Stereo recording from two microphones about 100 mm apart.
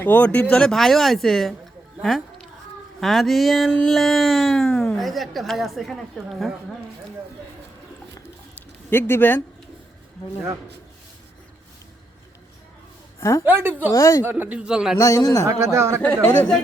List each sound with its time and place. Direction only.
0.0 s speech: 15° left (ahead or behind); by 6.5 s centre (ahead or behind)
8.5 s a sound: 25° left (ahead or behind)
13.1 s a sound: 30° left (ahead or behind)
13.4 s a woman's voice: 20° right (ahead or behind)
13.9 s a man's voice: 30° left (ahead or behind)
14.3 s speech: 20° right (ahead or behind)
14.9 s a man's voice: 30° left (ahead or behind)
15.4 s speech: 30° right (ahead or behind)
16.2 s speech: 20° left (ahead or behind)